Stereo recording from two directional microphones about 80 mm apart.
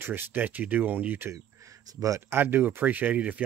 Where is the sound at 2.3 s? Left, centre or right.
Right.